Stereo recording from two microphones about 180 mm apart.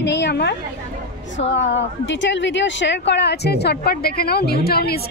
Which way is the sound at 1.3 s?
85° left.